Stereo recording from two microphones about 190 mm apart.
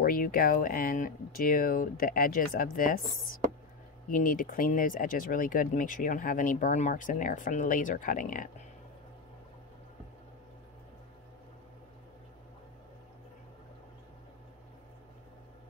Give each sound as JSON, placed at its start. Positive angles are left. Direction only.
{"t": 0.0, "sound": "speech", "side_deg": 45}